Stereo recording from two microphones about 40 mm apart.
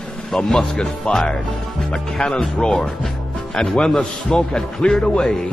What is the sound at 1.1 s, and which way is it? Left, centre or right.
Speech, left.